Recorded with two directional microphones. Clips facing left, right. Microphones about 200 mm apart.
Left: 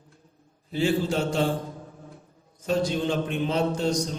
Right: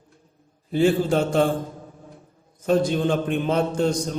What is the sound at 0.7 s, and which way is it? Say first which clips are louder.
Speech: right 5 dB; 50° right (ahead or behind).